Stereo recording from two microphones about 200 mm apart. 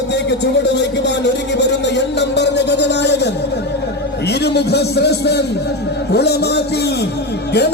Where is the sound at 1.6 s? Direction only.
60° left (ahead or behind).